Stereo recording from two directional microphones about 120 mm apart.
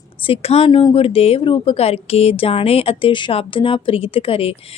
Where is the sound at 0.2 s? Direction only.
50° left (ahead or behind).